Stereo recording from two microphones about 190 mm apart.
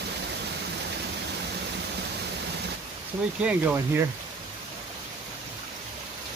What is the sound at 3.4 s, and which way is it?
Speech, 10° right (ahead or behind).